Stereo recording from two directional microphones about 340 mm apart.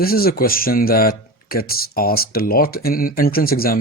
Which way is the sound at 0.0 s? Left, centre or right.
Left.